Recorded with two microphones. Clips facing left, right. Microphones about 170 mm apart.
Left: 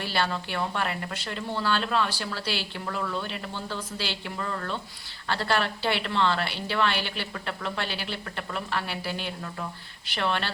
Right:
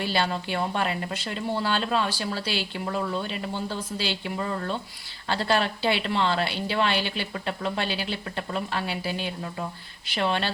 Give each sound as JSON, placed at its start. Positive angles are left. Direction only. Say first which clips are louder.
{"t": 0.0, "sound": "speech", "louder": "right 2 dB", "side_deg": -15}